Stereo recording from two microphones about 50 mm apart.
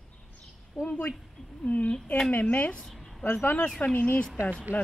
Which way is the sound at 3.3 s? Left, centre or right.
Left.